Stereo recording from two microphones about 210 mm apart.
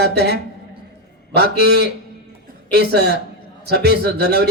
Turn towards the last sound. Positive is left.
turn(degrees=-50)  # may be behind; listen again after turning